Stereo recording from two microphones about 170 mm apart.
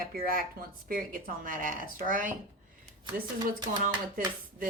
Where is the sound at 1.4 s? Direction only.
50° right (ahead or behind).